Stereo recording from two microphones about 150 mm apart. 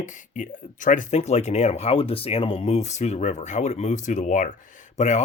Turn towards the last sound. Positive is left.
turn(degrees=50)  # may be behind; listen again after turning